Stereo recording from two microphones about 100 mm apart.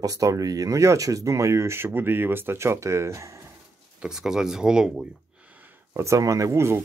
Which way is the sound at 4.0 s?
5° right (ahead or behind).